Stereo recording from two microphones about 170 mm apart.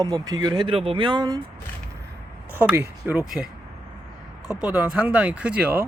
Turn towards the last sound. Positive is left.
turn(degrees=-10)  # may be behind; listen again after turning